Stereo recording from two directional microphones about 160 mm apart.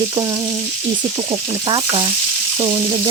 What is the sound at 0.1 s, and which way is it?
Stir, 20° right (ahead or behind).